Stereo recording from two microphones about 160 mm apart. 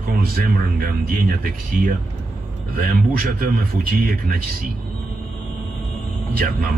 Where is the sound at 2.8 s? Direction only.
70° right (ahead or behind).